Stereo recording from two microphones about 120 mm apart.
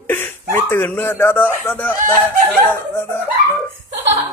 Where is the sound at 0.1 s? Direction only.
15° left (ahead or behind).